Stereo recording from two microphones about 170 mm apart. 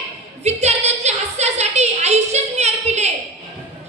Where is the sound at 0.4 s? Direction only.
40° right (ahead or behind).